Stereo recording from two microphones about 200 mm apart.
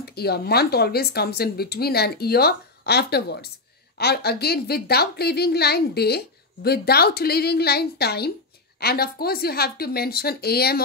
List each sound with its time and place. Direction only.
0.0 s a woman's voice: 50° left (ahead or behind)